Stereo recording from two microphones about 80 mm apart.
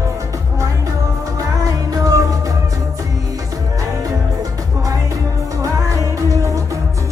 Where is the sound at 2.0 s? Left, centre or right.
Right.